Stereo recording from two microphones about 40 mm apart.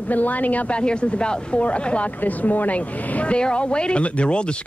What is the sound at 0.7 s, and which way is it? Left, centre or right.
Speech, left.